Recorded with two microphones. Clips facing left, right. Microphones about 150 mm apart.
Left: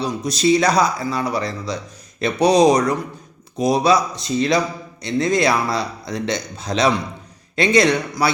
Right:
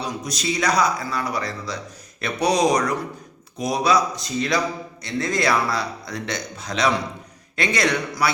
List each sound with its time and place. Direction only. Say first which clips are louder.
0.0 s a man's voice: left 8 dB; 30° left (ahead or behind)